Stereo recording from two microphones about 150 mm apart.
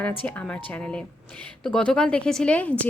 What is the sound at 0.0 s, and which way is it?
A woman's voice, 10° left (ahead or behind).